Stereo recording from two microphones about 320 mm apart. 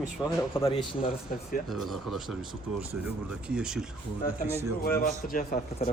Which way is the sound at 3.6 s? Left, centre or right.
Centre.